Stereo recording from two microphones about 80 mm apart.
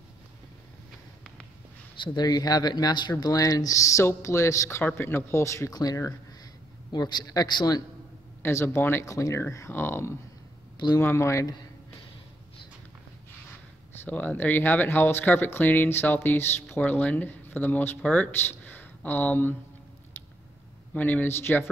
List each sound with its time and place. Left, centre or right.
2.0 s speech: left
5.7 s speech: left
6.9 s a man's voice: left
8.4 s speech: left
9.5 s speech: left
14.0 s speech: left
20.9 s speech: left